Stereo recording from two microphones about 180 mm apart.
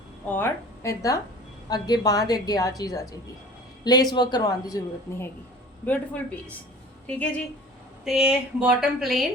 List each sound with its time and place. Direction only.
0.3 s a woman's voice: 10° left (ahead or behind)
8.0 s speech: 5° right (ahead or behind)